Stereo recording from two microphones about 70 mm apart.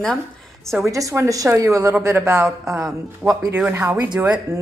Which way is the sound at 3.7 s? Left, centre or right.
Right.